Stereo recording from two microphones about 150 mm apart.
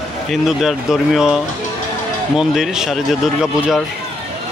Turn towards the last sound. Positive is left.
turn(degrees=-5)  # may be behind; listen again after turning